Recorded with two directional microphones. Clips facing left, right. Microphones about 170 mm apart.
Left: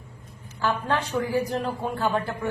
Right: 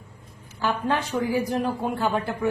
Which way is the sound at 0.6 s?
10° right (ahead or behind).